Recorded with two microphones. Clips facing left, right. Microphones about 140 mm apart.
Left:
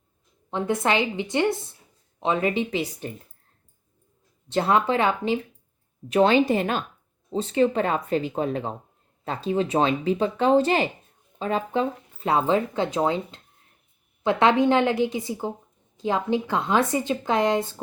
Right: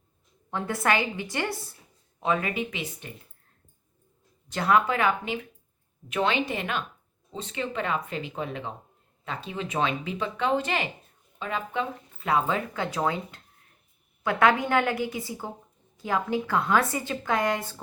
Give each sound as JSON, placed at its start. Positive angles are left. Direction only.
{"t": 0.5, "sound": "speech", "side_deg": 20}
{"t": 4.4, "sound": "speech", "side_deg": 25}